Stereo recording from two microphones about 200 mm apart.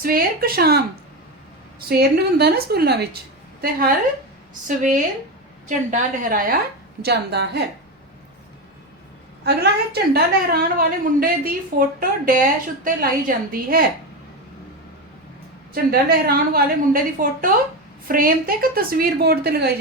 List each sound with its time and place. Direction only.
0.0 s a woman's voice: 45° right (ahead or behind)
1.9 s a woman's voice: 55° right (ahead or behind)
5.6 s a woman's voice: 40° right (ahead or behind)
7.0 s a woman's voice: 55° right (ahead or behind)
9.4 s a woman's voice: 55° right (ahead or behind)
15.7 s a woman's voice: 50° right (ahead or behind)